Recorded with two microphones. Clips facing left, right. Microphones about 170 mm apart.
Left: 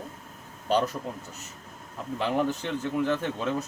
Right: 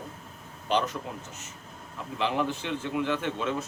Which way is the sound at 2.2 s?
45° left (ahead or behind).